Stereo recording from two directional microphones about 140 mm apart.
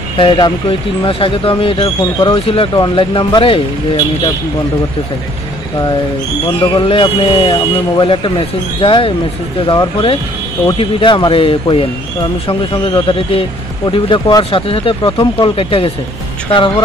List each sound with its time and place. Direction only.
0.2 s speech: 35° left (ahead or behind)
6.6 s speech: 35° left (ahead or behind)